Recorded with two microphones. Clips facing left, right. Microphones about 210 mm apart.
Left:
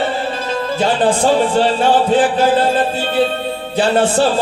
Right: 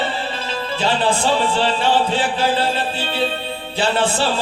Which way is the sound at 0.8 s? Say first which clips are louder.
Left 4 dB; 45° left (ahead or behind).